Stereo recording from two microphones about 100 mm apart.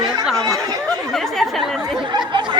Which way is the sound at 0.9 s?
40° right (ahead or behind).